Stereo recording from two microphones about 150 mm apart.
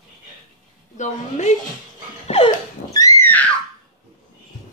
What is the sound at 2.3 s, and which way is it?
Dog, 45° left (ahead or behind).